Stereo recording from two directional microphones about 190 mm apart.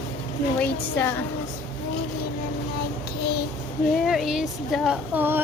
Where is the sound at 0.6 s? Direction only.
10° left (ahead or behind).